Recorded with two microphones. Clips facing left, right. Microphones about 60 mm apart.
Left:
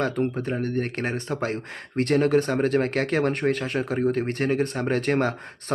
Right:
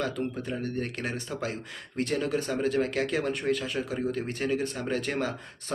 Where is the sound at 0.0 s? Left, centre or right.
Left.